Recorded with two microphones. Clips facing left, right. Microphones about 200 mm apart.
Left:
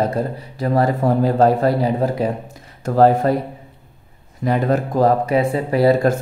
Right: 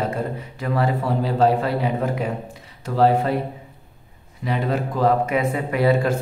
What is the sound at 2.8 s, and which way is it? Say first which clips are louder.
Speech: left 4 dB; 50° left (ahead or behind).